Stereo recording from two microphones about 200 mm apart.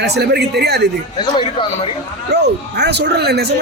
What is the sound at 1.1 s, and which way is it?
Speech, 25° left (ahead or behind).